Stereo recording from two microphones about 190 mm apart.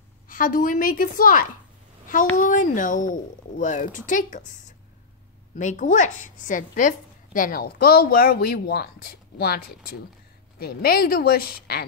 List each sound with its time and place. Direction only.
0.3 s a woman's voice: 45° left (ahead or behind)
5.6 s a woman's voice: 40° left (ahead or behind)